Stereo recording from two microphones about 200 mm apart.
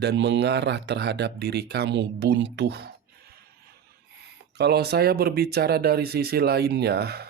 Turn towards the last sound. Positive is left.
turn(degrees=-55)  # may be behind; listen again after turning